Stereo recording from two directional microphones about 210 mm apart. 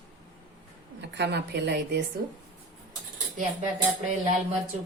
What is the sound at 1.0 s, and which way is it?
Speech, 55° right (ahead or behind).